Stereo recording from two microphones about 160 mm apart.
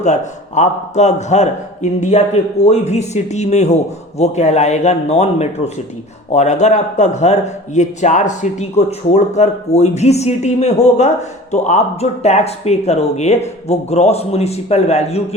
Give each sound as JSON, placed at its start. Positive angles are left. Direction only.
{"t": 0.0, "sound": "a man's voice", "side_deg": 45}